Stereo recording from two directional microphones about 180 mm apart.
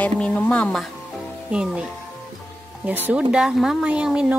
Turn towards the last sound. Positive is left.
turn(degrees=-5)  # may be behind; listen again after turning